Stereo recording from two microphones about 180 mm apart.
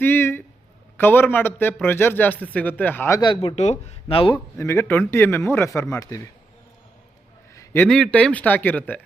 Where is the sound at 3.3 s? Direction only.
30° left (ahead or behind).